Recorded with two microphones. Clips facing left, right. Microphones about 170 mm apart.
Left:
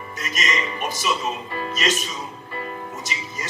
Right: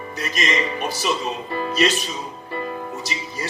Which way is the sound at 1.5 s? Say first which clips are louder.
Right 9 dB; 35° right (ahead or behind).